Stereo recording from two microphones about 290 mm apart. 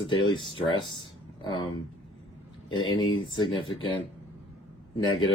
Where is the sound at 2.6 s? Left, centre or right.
Centre.